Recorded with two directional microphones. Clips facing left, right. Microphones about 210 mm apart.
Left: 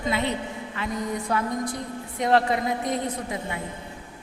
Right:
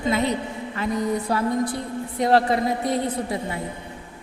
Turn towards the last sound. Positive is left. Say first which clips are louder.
# right 4 dB
turn(degrees=-35)  # may be behind; listen again after turning